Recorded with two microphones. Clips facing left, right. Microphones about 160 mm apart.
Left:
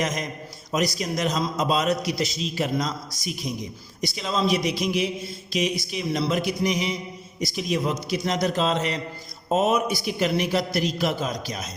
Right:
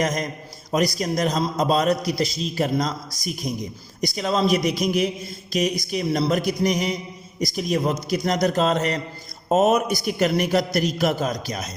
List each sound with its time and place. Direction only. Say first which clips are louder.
0.0 s a man's voice: right 3 dB; 40° right (ahead or behind)